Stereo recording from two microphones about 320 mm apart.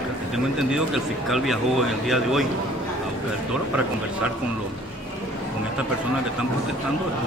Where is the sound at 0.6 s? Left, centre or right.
Centre.